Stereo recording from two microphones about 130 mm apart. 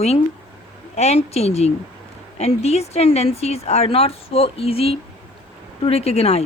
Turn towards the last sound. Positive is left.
turn(degrees=50)  # may be behind; listen again after turning